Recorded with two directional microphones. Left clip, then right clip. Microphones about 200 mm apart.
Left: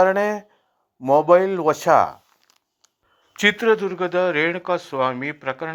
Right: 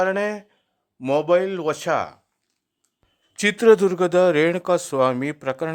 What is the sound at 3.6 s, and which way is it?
Speech, 50° right (ahead or behind).